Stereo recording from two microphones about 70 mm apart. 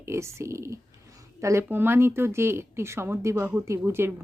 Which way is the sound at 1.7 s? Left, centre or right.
Right.